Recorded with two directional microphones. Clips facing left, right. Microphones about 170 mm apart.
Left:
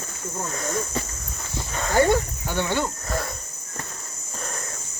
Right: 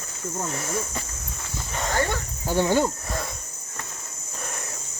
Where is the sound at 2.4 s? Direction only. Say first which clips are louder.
Right 4 dB; 40° right (ahead or behind).